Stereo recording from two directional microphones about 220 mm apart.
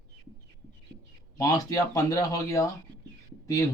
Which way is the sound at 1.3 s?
15° left (ahead or behind).